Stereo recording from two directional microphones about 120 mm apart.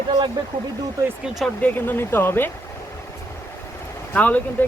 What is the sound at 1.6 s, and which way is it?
Speech, 15° left (ahead or behind).